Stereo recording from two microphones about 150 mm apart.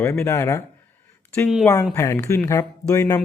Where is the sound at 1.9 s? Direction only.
20° left (ahead or behind).